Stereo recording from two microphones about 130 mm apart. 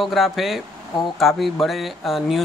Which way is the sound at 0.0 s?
Centre (ahead or behind).